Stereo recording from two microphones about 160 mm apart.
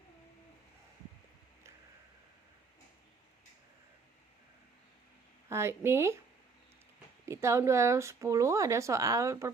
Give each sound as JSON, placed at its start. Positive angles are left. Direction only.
{"t": 5.5, "sound": "a woman's voice", "side_deg": -15}
{"t": 7.3, "sound": "speech", "side_deg": -15}